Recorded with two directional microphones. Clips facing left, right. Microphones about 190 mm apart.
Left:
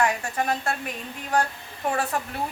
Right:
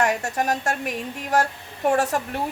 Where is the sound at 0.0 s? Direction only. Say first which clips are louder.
Right 2 dB; 45° right (ahead or behind).